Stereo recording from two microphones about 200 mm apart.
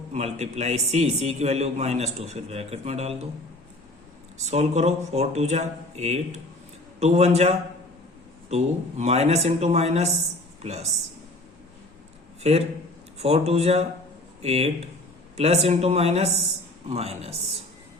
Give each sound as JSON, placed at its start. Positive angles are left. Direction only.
{"t": 0.1, "sound": "a man's voice", "side_deg": -35}
{"t": 4.4, "sound": "a man's voice", "side_deg": -35}
{"t": 12.4, "sound": "a man's voice", "side_deg": -30}